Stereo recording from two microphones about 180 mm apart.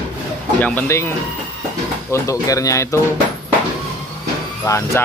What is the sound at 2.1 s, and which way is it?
Speech, 20° left (ahead or behind).